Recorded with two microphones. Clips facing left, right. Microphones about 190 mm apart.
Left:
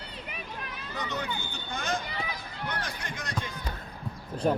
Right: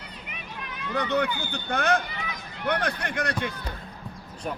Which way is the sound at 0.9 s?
65° right (ahead or behind).